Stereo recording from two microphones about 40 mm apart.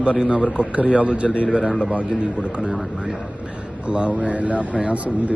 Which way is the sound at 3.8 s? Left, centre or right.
Right.